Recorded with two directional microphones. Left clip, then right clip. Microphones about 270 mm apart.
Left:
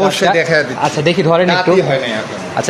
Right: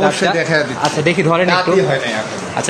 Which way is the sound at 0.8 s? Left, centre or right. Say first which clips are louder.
Left 1 dB; centre.